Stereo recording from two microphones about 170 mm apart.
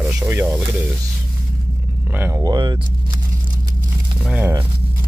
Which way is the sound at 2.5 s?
25° right (ahead or behind).